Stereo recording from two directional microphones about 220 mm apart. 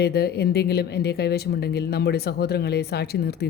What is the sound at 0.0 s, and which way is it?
A woman's voice, 45° left (ahead or behind).